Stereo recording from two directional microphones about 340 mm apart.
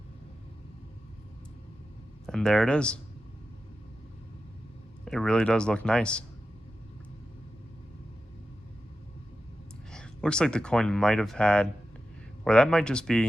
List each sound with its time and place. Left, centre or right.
2.2 s speech: centre
5.0 s speech: centre
9.9 s speech: centre